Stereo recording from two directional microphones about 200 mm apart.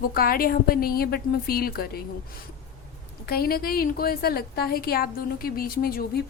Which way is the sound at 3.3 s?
50° left (ahead or behind).